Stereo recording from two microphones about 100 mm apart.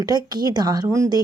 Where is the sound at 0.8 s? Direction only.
30° right (ahead or behind).